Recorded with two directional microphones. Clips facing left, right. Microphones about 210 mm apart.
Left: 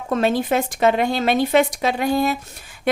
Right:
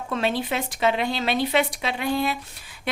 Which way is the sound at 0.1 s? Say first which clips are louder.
Left 6 dB; 45° left (ahead or behind).